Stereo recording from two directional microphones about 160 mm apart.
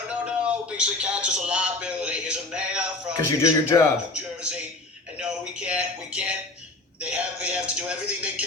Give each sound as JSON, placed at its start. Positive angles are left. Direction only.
{"t": 0.1, "sound": "speech", "side_deg": -5}
{"t": 3.4, "sound": "a man's voice", "side_deg": 20}
{"t": 4.1, "sound": "a sound", "side_deg": -5}
{"t": 7.0, "sound": "a man's voice", "side_deg": -5}